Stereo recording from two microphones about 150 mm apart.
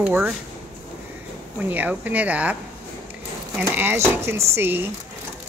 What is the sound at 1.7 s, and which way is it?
Speech, 10° right (ahead or behind).